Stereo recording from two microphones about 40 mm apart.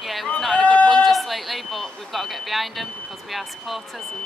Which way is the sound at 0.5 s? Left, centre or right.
Left.